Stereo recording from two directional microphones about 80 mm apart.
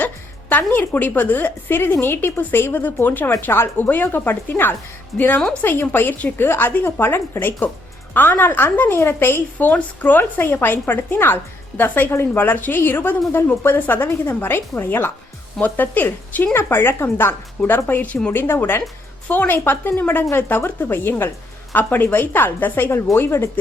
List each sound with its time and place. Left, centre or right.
0.0 s a woman's voice: left